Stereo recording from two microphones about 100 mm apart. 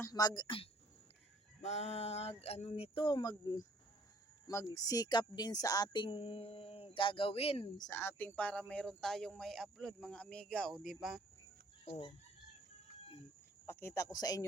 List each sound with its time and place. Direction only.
0.1 s speech: 40° left (ahead or behind); by 0.7 s 60° left (ahead or behind)
1.7 s a sound: 90° left
2.4 s speech: 90° left; by 7.7 s 75° left (ahead or behind)
7.9 s speech: 25° left (ahead or behind)
11.9 s chicken: 65° left (ahead or behind)
13.7 s speech: 25° left (ahead or behind)